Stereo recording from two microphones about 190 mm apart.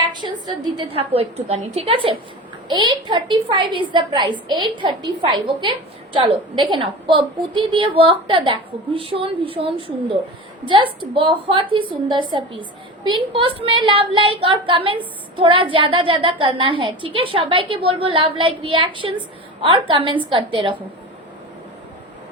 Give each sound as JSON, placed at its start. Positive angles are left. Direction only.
{"t": 0.1, "sound": "a woman's voice", "side_deg": -25}